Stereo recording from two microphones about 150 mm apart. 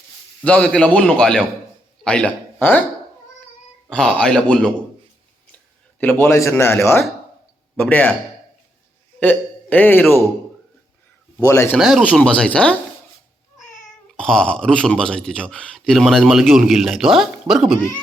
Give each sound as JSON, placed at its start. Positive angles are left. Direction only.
{"t": 0.4, "sound": "a man's voice", "side_deg": 5}
{"t": 3.8, "sound": "speech", "side_deg": 5}
{"t": 6.0, "sound": "a man's voice", "side_deg": 15}
{"t": 9.2, "sound": "a man's voice", "side_deg": 10}
{"t": 11.3, "sound": "a man's voice", "side_deg": 15}
{"t": 11.8, "sound": "a man's voice", "side_deg": 0}
{"t": 14.2, "sound": "speech", "side_deg": 5}